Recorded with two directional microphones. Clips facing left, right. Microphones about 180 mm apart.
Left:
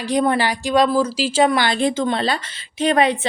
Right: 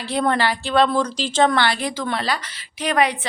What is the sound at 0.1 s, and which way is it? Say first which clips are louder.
A woman's voice: left 2 dB; 15° left (ahead or behind).